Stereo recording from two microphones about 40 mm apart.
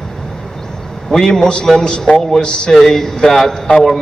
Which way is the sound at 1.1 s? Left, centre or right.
Centre.